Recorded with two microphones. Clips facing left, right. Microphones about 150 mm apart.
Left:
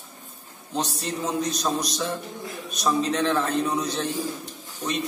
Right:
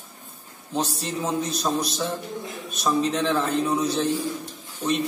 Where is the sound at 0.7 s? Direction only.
5° right (ahead or behind).